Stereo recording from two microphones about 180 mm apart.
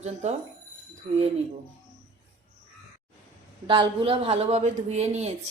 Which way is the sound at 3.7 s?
30° right (ahead or behind).